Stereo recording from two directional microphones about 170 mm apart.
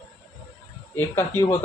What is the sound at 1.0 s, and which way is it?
Speech, 15° left (ahead or behind).